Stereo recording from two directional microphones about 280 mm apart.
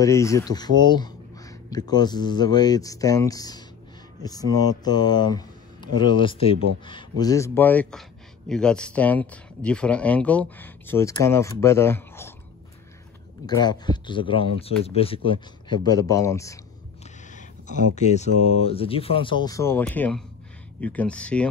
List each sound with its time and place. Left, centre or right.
0.0 s speech: centre
13.5 s speech: centre
17.4 s a sound: left
17.9 s speech: left; by 21.5 s centre